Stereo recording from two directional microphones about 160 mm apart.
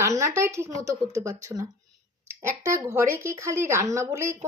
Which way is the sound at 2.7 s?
15° right (ahead or behind).